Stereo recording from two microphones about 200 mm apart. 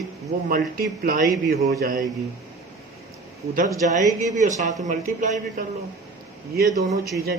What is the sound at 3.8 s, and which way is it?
Speech, 35° right (ahead or behind).